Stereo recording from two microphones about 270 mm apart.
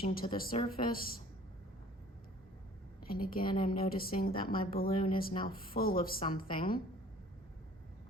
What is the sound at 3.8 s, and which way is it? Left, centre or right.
A woman's voice, left.